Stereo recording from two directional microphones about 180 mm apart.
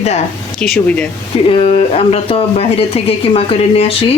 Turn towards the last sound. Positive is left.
turn(degrees=35)  # may be behind; listen again after turning